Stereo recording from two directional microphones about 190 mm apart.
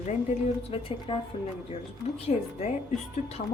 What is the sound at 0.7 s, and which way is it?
A woman's voice, 30° left (ahead or behind).